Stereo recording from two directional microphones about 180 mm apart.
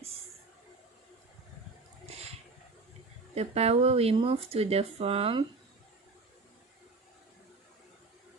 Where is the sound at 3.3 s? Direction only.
35° right (ahead or behind).